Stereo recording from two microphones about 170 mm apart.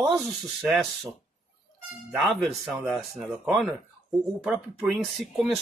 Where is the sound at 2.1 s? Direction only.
5° right (ahead or behind).